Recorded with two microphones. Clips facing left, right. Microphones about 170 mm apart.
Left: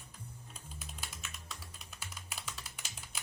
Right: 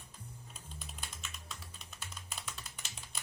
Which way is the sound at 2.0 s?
5° left (ahead or behind).